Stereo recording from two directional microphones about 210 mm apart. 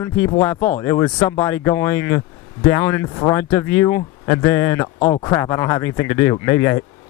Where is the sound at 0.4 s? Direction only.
10° left (ahead or behind).